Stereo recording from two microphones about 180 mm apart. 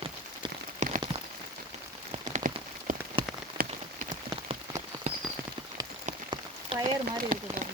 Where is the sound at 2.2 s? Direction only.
45° right (ahead or behind).